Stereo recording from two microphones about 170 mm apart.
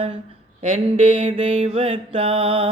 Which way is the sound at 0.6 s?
35° right (ahead or behind).